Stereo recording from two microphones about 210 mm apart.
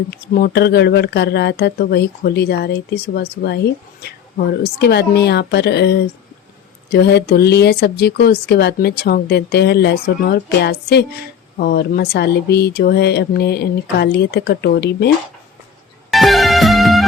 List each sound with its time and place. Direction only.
0.1 s speech: 50° left (ahead or behind)
16.1 s music: centre (ahead or behind)